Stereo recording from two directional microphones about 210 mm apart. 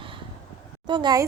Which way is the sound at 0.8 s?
20° right (ahead or behind).